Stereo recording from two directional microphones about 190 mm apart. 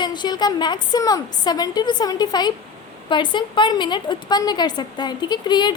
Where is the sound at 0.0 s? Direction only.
25° left (ahead or behind).